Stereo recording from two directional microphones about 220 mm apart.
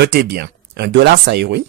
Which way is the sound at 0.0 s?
50° right (ahead or behind).